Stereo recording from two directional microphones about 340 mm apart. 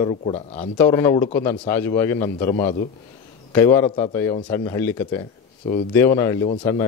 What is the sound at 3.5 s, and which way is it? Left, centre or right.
A man's voice, centre.